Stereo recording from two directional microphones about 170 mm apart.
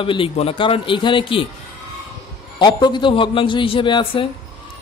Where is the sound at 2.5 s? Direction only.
25° left (ahead or behind).